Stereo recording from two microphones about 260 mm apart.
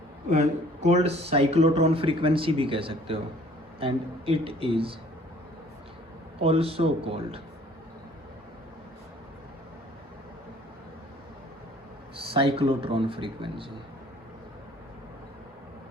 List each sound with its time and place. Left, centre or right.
0.3 s speech: right
6.4 s speech: right
12.3 s speech: right